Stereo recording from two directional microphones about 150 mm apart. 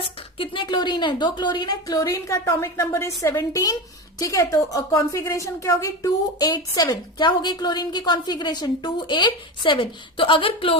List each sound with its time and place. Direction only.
0.3 s a woman's voice: 35° left (ahead or behind)